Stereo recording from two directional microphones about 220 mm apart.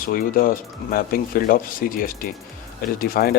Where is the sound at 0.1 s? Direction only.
40° left (ahead or behind).